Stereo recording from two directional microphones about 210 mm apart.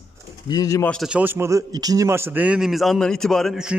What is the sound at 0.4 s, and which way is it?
Speech, 20° left (ahead or behind).